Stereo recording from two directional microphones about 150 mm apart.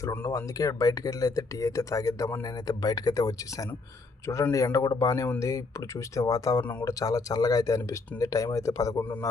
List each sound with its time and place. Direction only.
0.0 s speech: 20° left (ahead or behind)